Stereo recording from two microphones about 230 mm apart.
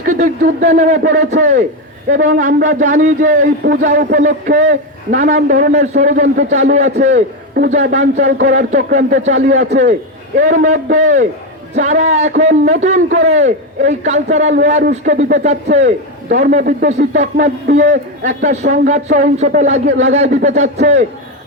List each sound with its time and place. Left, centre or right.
0.0 s a man's voice: right